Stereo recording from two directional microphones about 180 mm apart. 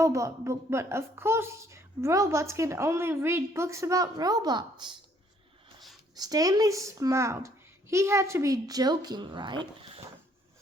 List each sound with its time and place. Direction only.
0.0 s a woman's voice: 15° right (ahead or behind)
6.1 s a woman's voice: 20° right (ahead or behind)